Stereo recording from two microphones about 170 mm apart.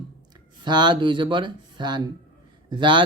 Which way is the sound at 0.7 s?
25° right (ahead or behind).